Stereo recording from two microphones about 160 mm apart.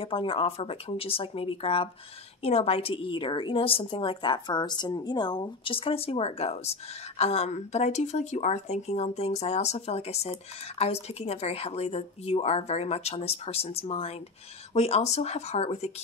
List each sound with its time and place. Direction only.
0.0 s a woman's voice: 35° left (ahead or behind)